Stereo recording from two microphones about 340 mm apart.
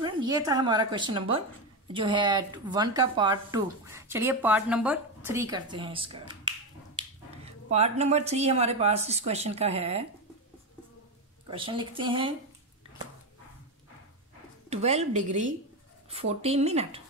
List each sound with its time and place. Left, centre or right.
0.0 s a woman's voice: centre
11.4 s a woman's voice: centre
14.7 s a woman's voice: centre